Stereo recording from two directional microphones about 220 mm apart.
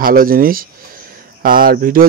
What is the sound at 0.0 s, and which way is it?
A man's voice, 40° right (ahead or behind).